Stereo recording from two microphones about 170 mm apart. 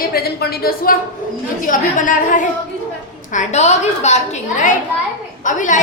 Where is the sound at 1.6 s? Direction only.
50° left (ahead or behind).